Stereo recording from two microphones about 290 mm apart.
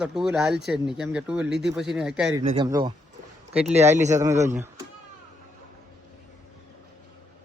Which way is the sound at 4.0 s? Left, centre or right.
Right.